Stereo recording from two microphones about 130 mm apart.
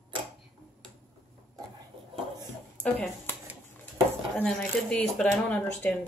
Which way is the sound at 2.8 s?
10° left (ahead or behind).